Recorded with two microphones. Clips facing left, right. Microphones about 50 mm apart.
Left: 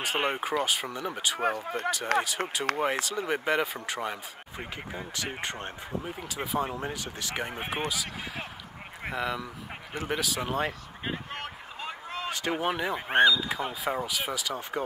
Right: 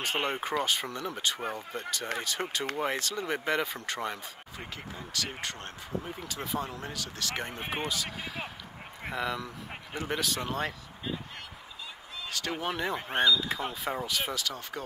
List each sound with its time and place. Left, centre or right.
0.0 s speech: centre
4.9 s speech: left
11.1 s a sound: left
12.3 s speech: centre